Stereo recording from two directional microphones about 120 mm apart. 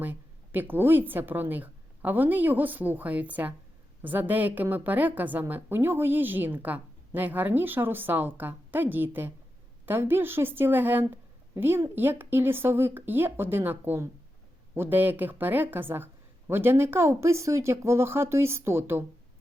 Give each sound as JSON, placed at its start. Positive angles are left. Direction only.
{"t": 0.0, "sound": "a woman's voice", "side_deg": -15}